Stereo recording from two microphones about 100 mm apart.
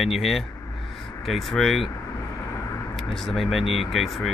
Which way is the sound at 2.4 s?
30° left (ahead or behind).